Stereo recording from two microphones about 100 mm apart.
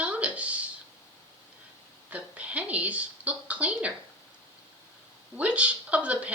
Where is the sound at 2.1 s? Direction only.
15° right (ahead or behind).